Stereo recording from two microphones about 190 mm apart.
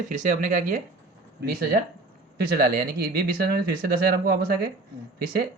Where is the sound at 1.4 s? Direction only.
60° right (ahead or behind).